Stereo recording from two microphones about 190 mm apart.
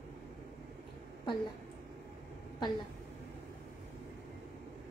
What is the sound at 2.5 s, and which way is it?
Speech, 25° left (ahead or behind).